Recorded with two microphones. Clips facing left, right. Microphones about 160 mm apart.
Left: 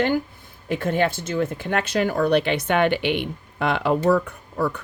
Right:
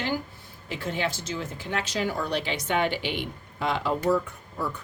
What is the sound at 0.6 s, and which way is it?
Speech, 55° left (ahead or behind).